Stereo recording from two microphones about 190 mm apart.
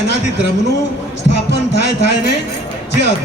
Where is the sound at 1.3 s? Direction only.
65° left (ahead or behind).